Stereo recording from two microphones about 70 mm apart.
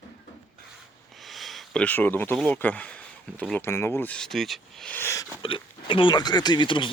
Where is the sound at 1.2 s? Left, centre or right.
Centre.